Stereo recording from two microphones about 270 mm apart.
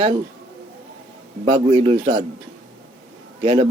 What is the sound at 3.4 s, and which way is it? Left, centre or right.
Speech, right.